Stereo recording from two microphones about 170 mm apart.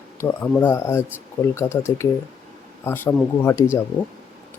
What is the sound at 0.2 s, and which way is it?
Speech, 10° left (ahead or behind).